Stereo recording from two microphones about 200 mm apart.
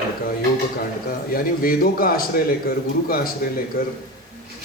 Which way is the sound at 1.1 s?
45° left (ahead or behind).